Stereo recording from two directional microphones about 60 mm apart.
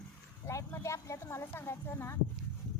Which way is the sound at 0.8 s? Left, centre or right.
Left.